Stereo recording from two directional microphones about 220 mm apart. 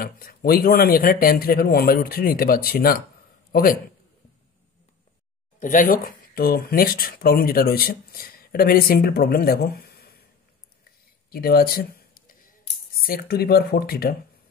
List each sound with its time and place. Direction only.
0.0 s a man's voice: 40° left (ahead or behind)
5.6 s speech: 35° left (ahead or behind)
11.2 s a sound: 45° left (ahead or behind)
12.9 s speech: 45° left (ahead or behind)